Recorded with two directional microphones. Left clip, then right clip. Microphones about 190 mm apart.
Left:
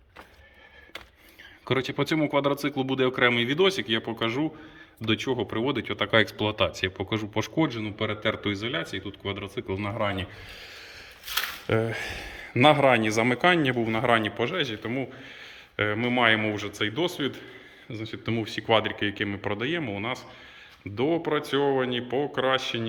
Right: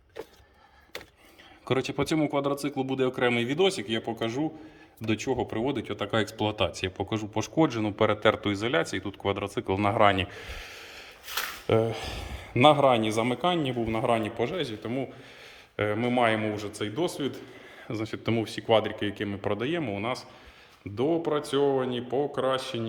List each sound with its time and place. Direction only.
1.6 s speech: 5° right (ahead or behind)
13.3 s speech: 40° left (ahead or behind)
13.6 s speech: 5° left (ahead or behind)
17.8 s speech: 15° right (ahead or behind); by 22.9 s centre (ahead or behind)